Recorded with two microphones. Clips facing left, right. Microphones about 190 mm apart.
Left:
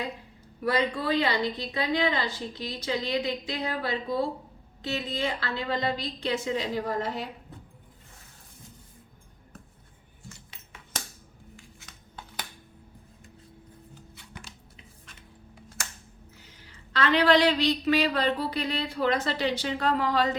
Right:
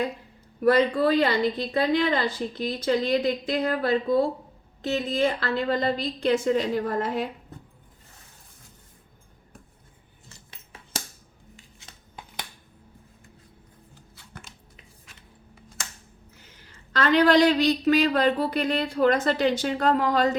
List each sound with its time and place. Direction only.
0.6 s speech: 55° right (ahead or behind)
16.9 s speech: 45° right (ahead or behind)